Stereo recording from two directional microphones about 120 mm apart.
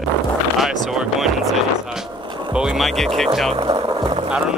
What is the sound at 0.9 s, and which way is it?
Speech, 5° right (ahead or behind).